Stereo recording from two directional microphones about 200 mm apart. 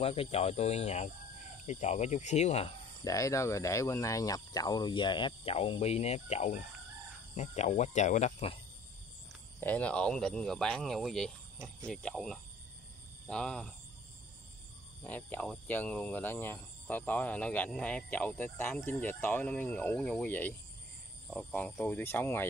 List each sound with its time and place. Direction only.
0.0 s speech: 30° left (ahead or behind)
3.0 s speech: 15° left (ahead or behind); by 8.5 s 35° left (ahead or behind)
9.6 s speech: 10° left (ahead or behind)
15.0 s speech: 10° left (ahead or behind)